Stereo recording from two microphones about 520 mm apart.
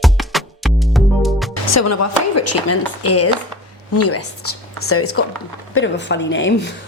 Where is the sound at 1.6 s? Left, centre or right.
Left.